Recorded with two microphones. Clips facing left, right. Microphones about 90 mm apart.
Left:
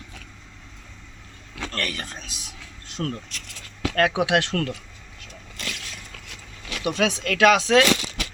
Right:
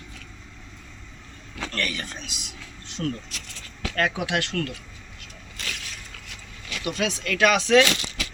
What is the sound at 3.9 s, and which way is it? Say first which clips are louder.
Speech: left 5 dB; 85° left.